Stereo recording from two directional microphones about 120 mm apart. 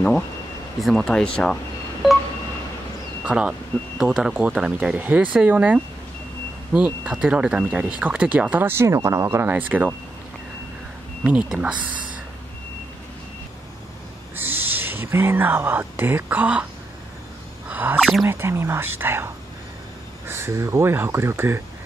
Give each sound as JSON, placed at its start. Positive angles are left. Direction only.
{"t": 0.7, "sound": "speech", "side_deg": 0}
{"t": 3.3, "sound": "speech", "side_deg": -10}
{"t": 11.5, "sound": "speech", "side_deg": -10}
{"t": 14.3, "sound": "speech", "side_deg": -15}
{"t": 17.6, "sound": "a sound", "side_deg": -15}
{"t": 17.9, "sound": "speech", "side_deg": 0}
{"t": 18.2, "sound": "speech", "side_deg": -20}